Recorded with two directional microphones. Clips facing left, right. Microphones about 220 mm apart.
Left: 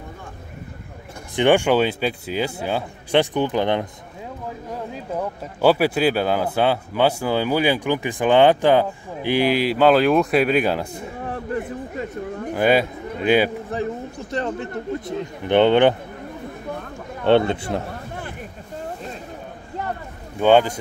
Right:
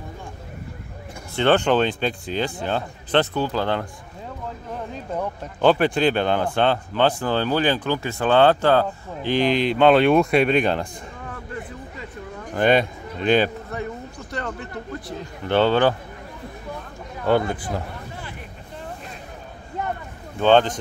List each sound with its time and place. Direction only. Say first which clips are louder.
1.3 s speech: left 2 dB; 15° left (ahead or behind)
4.9 s speech: even; 5° left (ahead or behind)
11.2 s a sound: left 8 dB; 45° left (ahead or behind)
12.5 s a man's voice: even; 5° left (ahead or behind)
13.7 s a sound: left 5 dB; 25° left (ahead or behind)
14.9 s speech: left 6 dB; 20° left (ahead or behind)
17.2 s speech: left 4 dB; 25° left (ahead or behind)
20.3 s speech: left 1 dB; 10° left (ahead or behind)